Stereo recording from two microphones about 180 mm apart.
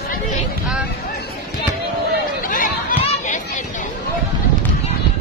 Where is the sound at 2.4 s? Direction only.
50° left (ahead or behind).